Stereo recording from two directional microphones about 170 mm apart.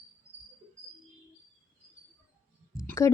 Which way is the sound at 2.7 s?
20° left (ahead or behind).